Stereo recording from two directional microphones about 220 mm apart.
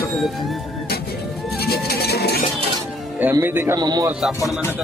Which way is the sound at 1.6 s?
45° left (ahead or behind).